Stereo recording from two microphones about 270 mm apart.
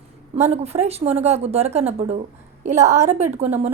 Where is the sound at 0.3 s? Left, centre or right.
Right.